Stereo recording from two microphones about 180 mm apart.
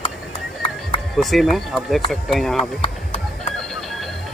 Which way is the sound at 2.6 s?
35° left (ahead or behind).